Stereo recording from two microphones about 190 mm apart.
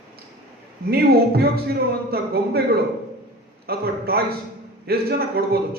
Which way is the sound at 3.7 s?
55° right (ahead or behind).